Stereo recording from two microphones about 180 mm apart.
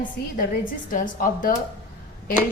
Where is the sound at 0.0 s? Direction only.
50° left (ahead or behind).